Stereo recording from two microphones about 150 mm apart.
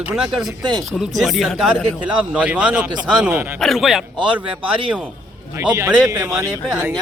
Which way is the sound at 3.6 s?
Centre (ahead or behind).